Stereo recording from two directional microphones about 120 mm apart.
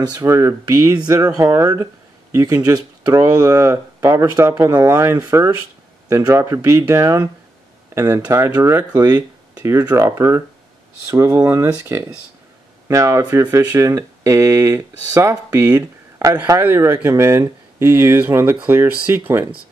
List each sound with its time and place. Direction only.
0.1 s speech: 30° right (ahead or behind)